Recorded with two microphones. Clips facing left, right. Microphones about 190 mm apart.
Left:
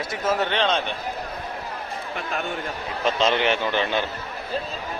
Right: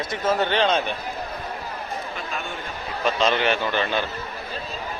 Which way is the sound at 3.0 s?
20° left (ahead or behind).